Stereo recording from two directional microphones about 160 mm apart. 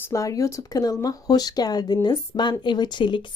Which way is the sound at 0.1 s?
20° left (ahead or behind).